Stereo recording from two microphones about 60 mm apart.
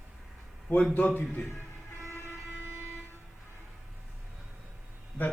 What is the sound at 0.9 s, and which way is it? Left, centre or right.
Speech, left.